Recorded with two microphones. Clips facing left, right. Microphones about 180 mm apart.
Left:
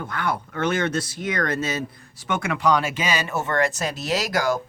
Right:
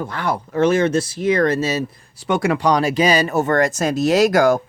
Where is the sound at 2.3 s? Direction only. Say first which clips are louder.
Right 5 dB; 35° right (ahead or behind).